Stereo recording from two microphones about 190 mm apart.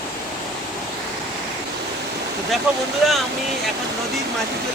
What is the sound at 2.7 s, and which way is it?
Speech, 5° right (ahead or behind).